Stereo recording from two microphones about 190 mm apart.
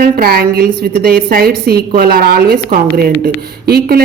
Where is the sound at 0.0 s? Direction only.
50° right (ahead or behind).